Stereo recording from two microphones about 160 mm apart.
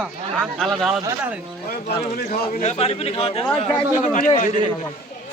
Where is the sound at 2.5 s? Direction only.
45° left (ahead or behind).